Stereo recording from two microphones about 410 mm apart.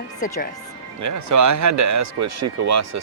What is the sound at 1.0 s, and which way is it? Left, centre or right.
Speech, right.